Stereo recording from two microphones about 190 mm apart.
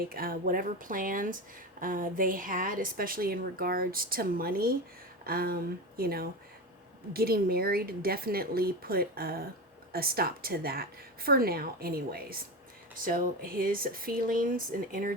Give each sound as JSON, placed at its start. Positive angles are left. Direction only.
{"t": 0.1, "sound": "a woman's voice", "side_deg": -50}